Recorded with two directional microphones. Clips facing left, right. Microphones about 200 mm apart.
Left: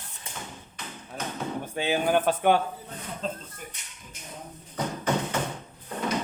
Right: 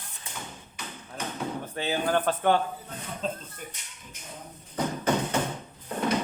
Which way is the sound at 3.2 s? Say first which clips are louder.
Right 1 dB; centre (ahead or behind).